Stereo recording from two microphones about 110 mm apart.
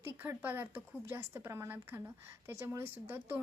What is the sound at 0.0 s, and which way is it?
A woman's voice, 20° right (ahead or behind).